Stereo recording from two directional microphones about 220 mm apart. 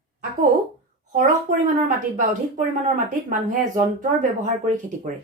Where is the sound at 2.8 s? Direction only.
35° right (ahead or behind).